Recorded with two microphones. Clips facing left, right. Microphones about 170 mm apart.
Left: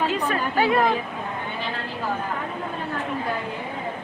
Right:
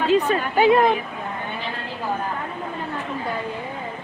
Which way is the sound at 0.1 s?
20° right (ahead or behind).